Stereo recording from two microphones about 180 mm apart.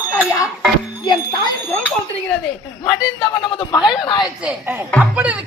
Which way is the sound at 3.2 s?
25° left (ahead or behind).